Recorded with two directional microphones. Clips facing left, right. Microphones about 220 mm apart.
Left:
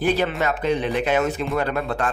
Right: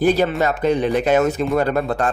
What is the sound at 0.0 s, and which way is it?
Speech, 40° right (ahead or behind).